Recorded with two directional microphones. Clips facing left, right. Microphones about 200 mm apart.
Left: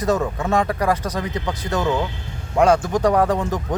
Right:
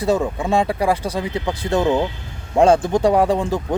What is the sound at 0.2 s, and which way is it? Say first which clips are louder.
Speech: right 1 dB; 10° right (ahead or behind).